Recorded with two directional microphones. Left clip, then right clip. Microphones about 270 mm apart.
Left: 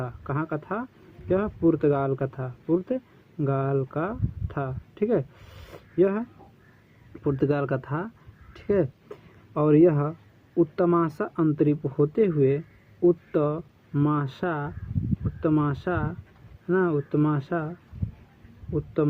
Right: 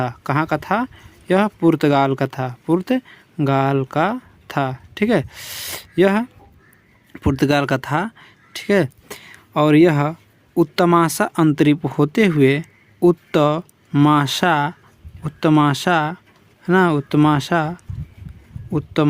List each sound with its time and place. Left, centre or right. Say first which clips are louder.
0.0 s speech: right 11 dB; right